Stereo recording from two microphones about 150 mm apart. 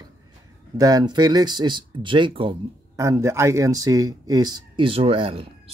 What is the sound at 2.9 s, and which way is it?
Speech, 20° right (ahead or behind).